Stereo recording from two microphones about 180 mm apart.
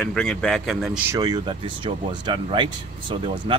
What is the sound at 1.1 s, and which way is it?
Speech, 20° right (ahead or behind).